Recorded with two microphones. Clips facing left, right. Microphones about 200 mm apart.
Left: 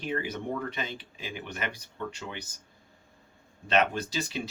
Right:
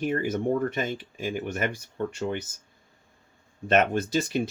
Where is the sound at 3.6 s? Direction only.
50° right (ahead or behind).